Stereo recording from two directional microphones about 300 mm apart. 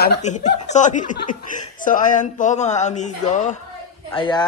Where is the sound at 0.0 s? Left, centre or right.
Left.